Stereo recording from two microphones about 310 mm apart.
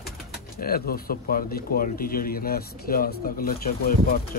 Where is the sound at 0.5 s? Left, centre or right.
Left.